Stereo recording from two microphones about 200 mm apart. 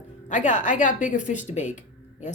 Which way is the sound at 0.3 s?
35° left (ahead or behind).